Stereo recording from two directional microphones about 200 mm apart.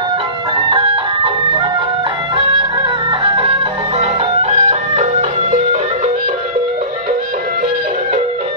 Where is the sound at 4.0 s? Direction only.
35° right (ahead or behind).